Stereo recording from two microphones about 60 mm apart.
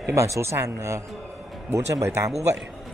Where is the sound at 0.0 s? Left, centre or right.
Right.